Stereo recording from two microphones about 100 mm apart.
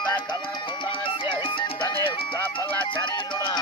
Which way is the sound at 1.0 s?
60° left (ahead or behind).